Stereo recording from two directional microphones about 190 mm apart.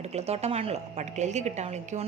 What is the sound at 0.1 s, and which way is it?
Speech, 35° right (ahead or behind).